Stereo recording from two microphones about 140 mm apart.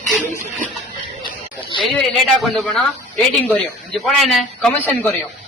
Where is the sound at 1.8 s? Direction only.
Centre (ahead or behind).